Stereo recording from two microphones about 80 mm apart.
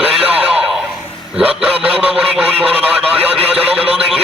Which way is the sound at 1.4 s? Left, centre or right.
Centre.